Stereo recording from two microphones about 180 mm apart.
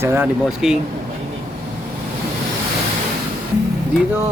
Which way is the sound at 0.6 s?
Centre (ahead or behind).